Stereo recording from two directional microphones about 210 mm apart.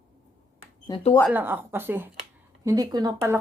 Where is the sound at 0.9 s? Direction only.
15° left (ahead or behind).